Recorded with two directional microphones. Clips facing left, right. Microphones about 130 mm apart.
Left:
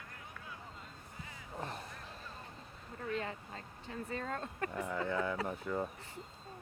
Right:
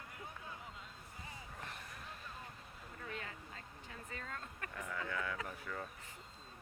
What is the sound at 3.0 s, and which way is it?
Speech, 35° left (ahead or behind).